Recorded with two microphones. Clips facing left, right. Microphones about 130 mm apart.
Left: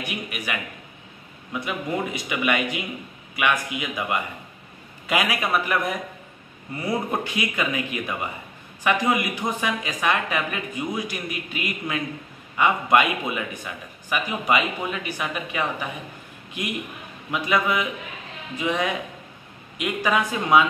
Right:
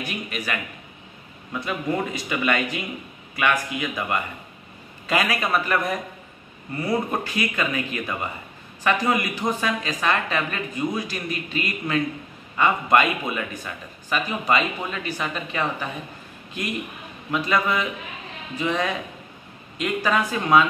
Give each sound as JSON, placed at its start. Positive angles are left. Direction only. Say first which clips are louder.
{"t": 0.0, "sound": "a man's voice", "louder": "right 1 dB", "side_deg": 15}
{"t": 17.3, "sound": "speech", "louder": "even", "side_deg": 15}